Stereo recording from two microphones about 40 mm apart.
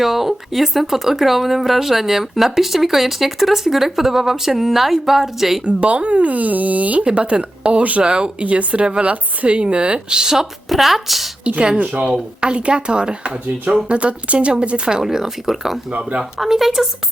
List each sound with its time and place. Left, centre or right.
0.0 s speech: centre
5.6 s speech: right
7.0 s speech: right
8.0 s speech: right
8.4 s speech: right
10.1 s speech: centre
10.7 s speech: centre
11.4 s speech: right
15.0 s speech: centre